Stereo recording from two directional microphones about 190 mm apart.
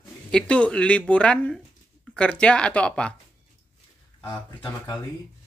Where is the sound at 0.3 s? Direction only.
5° left (ahead or behind).